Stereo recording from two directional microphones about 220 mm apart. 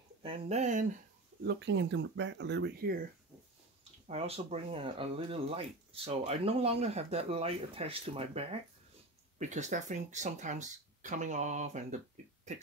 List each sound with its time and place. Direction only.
0.2 s speech: 30° right (ahead or behind)
1.4 s speech: 50° right (ahead or behind)
4.1 s speech: 25° right (ahead or behind)